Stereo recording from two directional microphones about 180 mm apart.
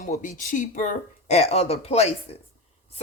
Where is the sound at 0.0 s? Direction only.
45° left (ahead or behind).